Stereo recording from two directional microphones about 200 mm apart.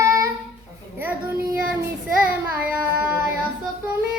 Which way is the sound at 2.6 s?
5° right (ahead or behind).